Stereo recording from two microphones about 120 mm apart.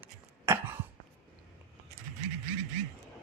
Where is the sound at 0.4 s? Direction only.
20° right (ahead or behind).